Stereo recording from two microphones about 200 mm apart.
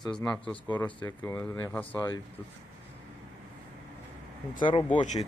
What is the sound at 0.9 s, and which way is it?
Speech, 25° left (ahead or behind).